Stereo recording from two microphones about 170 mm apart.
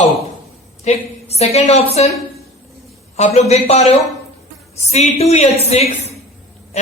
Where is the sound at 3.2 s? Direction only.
40° left (ahead or behind).